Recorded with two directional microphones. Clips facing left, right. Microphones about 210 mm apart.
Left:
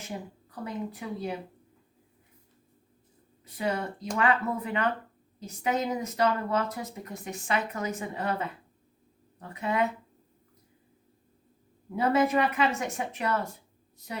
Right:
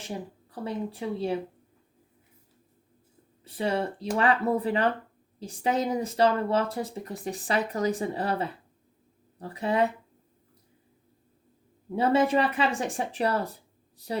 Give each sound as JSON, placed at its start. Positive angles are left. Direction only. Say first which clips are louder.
{"t": 0.5, "sound": "speech", "louder": "right 3 dB", "side_deg": -30}
{"t": 3.4, "sound": "speech", "louder": "right 3 dB", "side_deg": -30}
{"t": 11.9, "sound": "speech", "louder": "right 2 dB", "side_deg": -30}